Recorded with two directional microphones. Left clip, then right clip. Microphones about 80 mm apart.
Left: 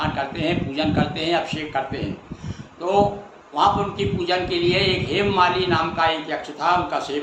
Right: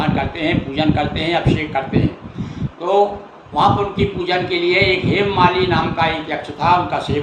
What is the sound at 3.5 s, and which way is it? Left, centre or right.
A man's voice, centre.